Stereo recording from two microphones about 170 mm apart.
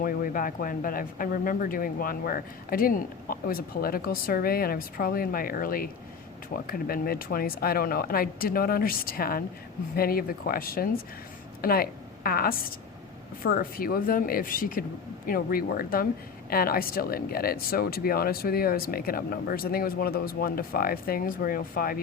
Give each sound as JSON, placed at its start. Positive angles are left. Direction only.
{"t": 0.0, "sound": "a woman's voice", "side_deg": 55}